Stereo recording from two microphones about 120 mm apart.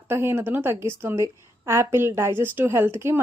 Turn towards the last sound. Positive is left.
turn(degrees=-20)  # may be behind; listen again after turning